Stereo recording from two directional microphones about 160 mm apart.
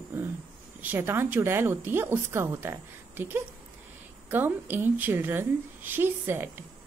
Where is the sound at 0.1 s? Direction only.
10° right (ahead or behind).